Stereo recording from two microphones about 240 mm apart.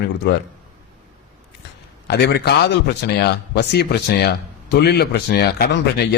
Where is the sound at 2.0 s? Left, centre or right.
Left.